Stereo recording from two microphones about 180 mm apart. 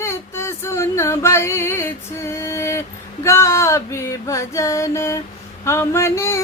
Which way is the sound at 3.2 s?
15° left (ahead or behind).